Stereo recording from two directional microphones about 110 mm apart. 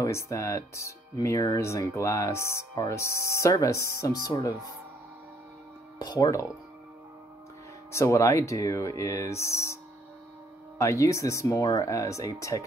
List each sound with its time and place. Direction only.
0.0 s speech: 25° left (ahead or behind)
5.9 s speech: 40° left (ahead or behind)
7.9 s speech: 25° left (ahead or behind)
10.8 s speech: 30° left (ahead or behind)